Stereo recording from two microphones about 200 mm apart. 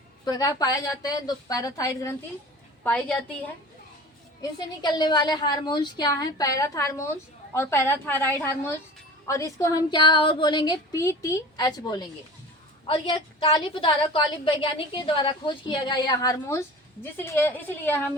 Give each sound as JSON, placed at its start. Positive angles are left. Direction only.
{"t": 0.3, "sound": "a woman's voice", "side_deg": 20}
{"t": 4.8, "sound": "a woman's voice", "side_deg": 20}